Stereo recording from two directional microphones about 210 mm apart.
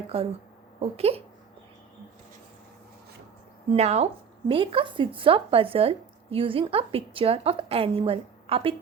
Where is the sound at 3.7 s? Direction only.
30° right (ahead or behind).